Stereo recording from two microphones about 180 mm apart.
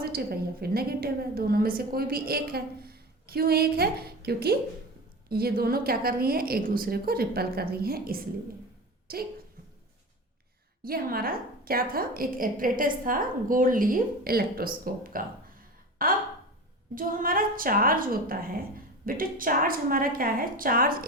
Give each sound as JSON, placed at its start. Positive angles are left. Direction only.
{"t": 0.0, "sound": "a woman's voice", "side_deg": -60}
{"t": 10.8, "sound": "a woman's voice", "side_deg": -55}